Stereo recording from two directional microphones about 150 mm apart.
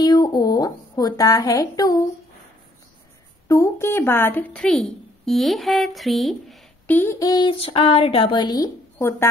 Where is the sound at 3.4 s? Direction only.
20° left (ahead or behind); by 6.6 s centre (ahead or behind).